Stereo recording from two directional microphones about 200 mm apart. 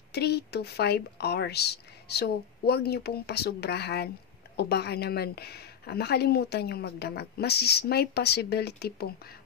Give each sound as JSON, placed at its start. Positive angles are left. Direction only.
{"t": 0.1, "sound": "a woman's voice", "side_deg": 55}